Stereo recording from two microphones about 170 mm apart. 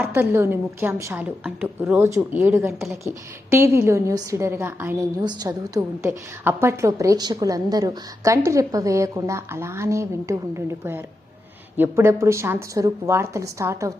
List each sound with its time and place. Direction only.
0.1 s a woman's voice: 15° right (ahead or behind)